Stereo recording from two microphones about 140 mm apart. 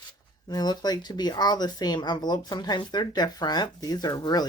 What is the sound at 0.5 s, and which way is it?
Speech, 30° left (ahead or behind).